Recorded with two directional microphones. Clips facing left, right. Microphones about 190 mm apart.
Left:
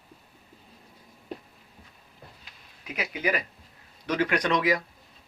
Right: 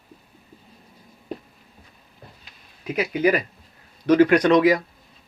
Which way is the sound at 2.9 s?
40° right (ahead or behind).